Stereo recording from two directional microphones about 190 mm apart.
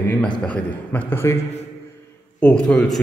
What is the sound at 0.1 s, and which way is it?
A man's voice, 5° left (ahead or behind).